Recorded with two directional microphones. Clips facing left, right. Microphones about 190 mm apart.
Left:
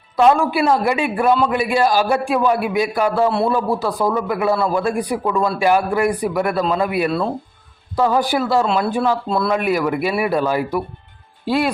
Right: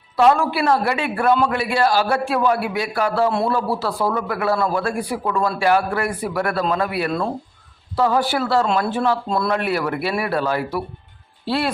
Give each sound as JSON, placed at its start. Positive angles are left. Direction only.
{"t": 0.2, "sound": "a man's voice", "side_deg": 15}
{"t": 3.2, "sound": "a man's voice", "side_deg": 5}
{"t": 3.5, "sound": "a man's voice", "side_deg": 15}